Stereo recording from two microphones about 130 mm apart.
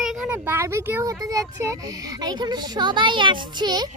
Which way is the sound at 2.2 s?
35° right (ahead or behind).